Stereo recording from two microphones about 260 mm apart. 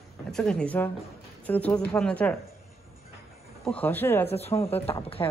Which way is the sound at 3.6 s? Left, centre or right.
Centre.